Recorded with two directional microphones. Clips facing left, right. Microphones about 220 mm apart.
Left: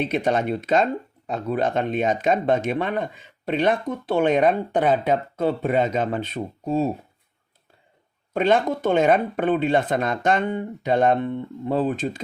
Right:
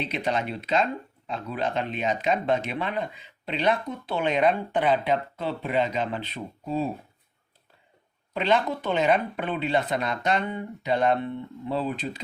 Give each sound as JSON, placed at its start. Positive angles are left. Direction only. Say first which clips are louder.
{"t": 0.0, "sound": "speech", "louder": "left 6 dB", "side_deg": 50}
{"t": 8.3, "sound": "speech", "louder": "left 5 dB", "side_deg": 50}